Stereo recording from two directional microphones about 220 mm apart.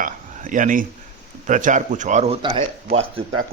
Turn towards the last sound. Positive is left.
turn(degrees=-25)  # may be behind; listen again after turning